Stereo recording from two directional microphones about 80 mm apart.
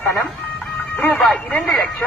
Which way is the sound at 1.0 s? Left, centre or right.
Left.